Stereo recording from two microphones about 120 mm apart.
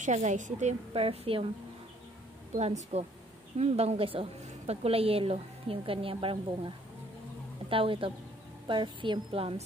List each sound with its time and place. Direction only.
0.0 s a woman's voice: 80° right
0.9 s a woman's voice: 50° right (ahead or behind)
2.5 s a woman's voice: 65° right (ahead or behind); by 6.7 s 50° right (ahead or behind)
7.7 s a woman's voice: 50° right (ahead or behind)